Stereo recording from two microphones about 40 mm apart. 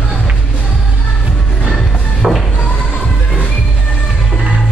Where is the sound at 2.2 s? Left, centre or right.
Right.